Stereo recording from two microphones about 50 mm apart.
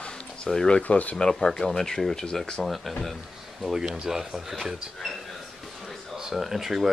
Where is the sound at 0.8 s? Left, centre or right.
Left.